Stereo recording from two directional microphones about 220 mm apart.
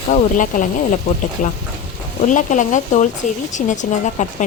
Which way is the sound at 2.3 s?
35° left (ahead or behind).